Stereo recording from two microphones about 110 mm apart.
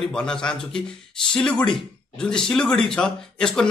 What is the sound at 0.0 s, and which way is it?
Speech, 5° left (ahead or behind).